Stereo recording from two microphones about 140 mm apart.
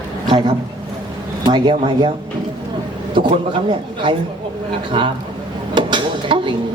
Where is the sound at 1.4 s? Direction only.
35° right (ahead or behind).